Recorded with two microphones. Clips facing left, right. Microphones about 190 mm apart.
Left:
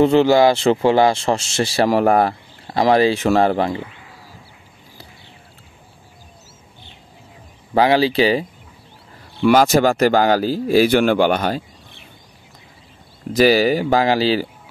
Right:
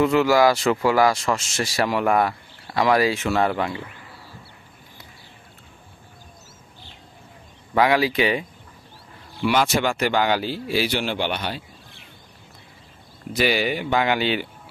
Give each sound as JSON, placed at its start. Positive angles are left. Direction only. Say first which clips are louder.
{"t": 0.0, "sound": "speech", "louder": "left 4 dB", "side_deg": 30}
{"t": 7.7, "sound": "speech", "louder": "left 4 dB", "side_deg": 30}
{"t": 9.5, "sound": "speech", "louder": "left 8 dB", "side_deg": 40}
{"t": 13.3, "sound": "speech", "louder": "left 8 dB", "side_deg": 40}